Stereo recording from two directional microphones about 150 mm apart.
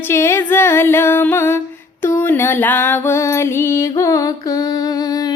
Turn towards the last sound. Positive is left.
turn(degrees=25)  # may be behind; listen again after turning